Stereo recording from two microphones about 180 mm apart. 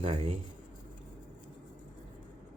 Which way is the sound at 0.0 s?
30° right (ahead or behind).